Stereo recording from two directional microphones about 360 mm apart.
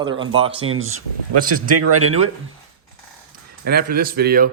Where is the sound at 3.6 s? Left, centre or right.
Right.